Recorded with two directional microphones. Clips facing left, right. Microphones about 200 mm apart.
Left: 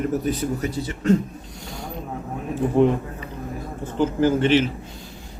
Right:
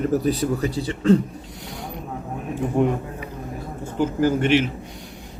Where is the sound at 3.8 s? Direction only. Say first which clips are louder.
Left 1 dB; 10° right (ahead or behind).